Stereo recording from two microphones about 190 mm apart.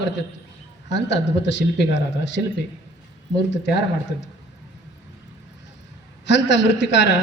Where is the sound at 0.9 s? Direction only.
65° left (ahead or behind).